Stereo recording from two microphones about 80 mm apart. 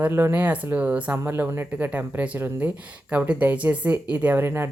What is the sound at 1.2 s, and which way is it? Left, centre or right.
Speech, right.